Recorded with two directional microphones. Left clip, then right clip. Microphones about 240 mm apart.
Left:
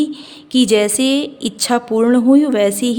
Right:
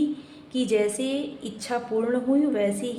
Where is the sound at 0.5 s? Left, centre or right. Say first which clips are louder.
Left 10 dB; left.